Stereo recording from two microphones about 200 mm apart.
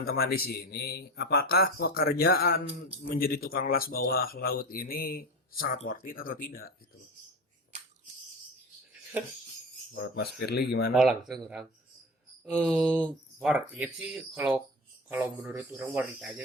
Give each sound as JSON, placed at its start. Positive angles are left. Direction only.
{"t": 0.0, "sound": "speech", "side_deg": 50}
{"t": 9.9, "sound": "speech", "side_deg": 50}
{"t": 10.9, "sound": "speech", "side_deg": 0}